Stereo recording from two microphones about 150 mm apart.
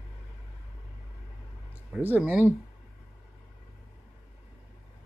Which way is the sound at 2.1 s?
10° right (ahead or behind).